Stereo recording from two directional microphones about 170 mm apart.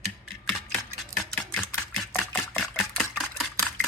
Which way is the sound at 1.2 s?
5° left (ahead or behind).